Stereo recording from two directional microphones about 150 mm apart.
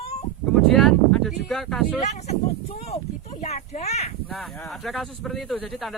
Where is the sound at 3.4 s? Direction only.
45° left (ahead or behind).